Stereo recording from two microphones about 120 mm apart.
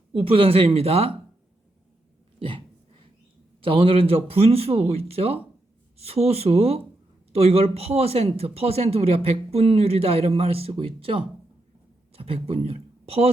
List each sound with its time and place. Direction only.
0.2 s speech: 55° right (ahead or behind)
3.6 s speech: 50° right (ahead or behind)